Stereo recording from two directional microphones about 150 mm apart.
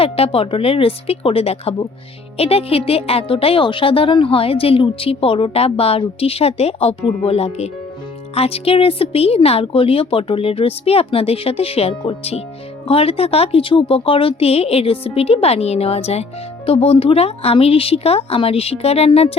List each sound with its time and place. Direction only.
0.0 s a woman's voice: 40° left (ahead or behind)